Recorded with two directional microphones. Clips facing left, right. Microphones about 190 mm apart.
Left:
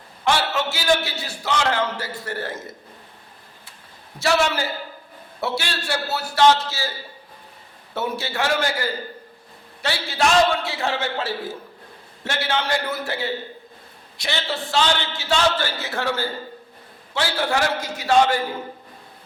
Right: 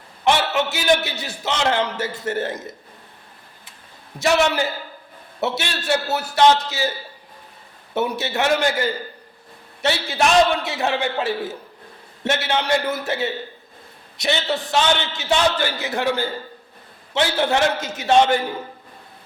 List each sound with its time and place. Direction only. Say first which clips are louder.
0.3 s a man's voice: right 3 dB; 20° right (ahead or behind)
4.2 s a man's voice: right 2 dB; 20° right (ahead or behind)
7.9 s a man's voice: right 3 dB; 20° right (ahead or behind)